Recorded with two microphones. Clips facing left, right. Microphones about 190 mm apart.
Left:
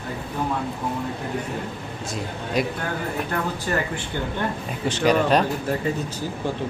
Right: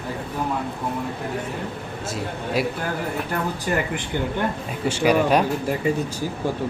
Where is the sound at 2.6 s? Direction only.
5° right (ahead or behind).